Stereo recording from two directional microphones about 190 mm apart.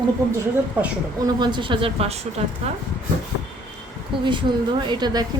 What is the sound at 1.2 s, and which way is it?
A woman's voice, 25° right (ahead or behind).